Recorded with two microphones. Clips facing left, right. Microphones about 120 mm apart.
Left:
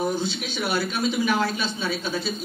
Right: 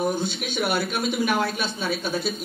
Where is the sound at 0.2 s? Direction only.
50° right (ahead or behind).